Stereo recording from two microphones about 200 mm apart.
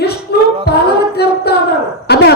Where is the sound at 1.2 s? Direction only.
55° left (ahead or behind).